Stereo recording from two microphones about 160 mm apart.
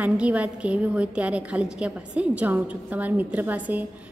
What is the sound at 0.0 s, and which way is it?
A woman's voice, 10° right (ahead or behind).